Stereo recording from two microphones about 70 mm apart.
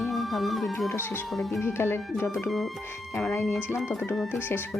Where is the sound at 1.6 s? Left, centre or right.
Left.